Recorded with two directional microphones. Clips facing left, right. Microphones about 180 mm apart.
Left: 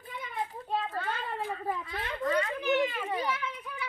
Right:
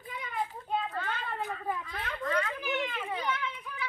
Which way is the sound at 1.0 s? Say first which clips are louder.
Left 1 dB; 30° left (ahead or behind).